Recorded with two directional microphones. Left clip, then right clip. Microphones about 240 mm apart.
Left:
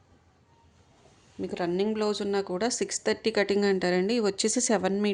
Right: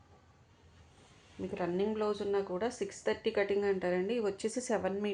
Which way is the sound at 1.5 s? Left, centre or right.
Left.